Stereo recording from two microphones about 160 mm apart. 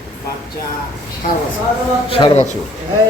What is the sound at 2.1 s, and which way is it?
Speech, 30° left (ahead or behind).